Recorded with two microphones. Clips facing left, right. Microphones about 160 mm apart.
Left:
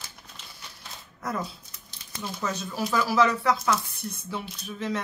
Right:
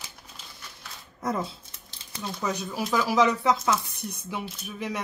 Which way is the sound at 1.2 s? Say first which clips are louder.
Right 3 dB; 25° right (ahead or behind).